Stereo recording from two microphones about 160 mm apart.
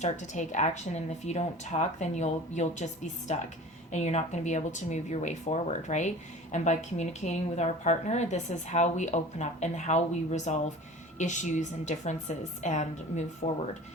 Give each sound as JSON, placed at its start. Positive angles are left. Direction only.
{"t": 0.0, "sound": "speech", "side_deg": 50}